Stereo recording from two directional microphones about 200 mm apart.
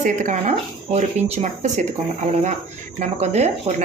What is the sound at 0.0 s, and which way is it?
Speech, 40° right (ahead or behind).